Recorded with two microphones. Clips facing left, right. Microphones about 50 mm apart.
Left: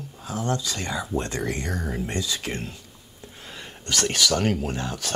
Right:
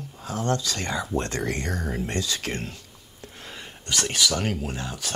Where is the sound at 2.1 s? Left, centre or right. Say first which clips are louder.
Even; right.